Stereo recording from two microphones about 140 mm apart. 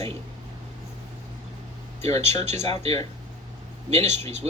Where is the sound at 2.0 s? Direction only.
50° right (ahead or behind).